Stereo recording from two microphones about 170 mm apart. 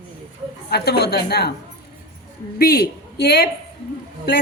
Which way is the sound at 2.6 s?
65° left (ahead or behind).